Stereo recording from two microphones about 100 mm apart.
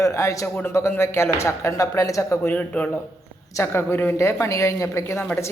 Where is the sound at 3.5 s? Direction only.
25° left (ahead or behind).